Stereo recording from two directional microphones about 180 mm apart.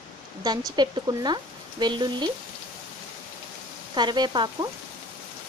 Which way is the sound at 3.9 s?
25° right (ahead or behind).